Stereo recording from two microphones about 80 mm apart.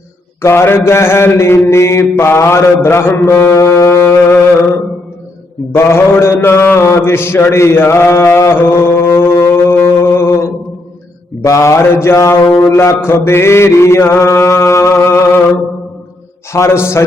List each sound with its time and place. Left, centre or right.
0.4 s a man's voice: left
3.2 s mantra: left
11.4 s a man's voice: left